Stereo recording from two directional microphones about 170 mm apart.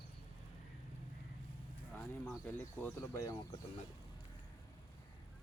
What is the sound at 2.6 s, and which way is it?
Speech, 15° left (ahead or behind).